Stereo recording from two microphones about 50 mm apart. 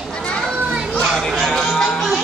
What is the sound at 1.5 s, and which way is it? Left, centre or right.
Music, centre.